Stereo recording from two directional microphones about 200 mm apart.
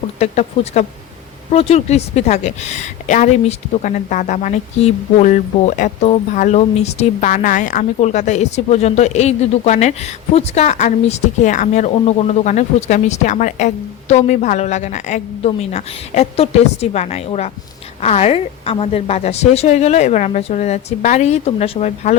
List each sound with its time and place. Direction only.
0.2 s a woman's voice: 35° left (ahead or behind)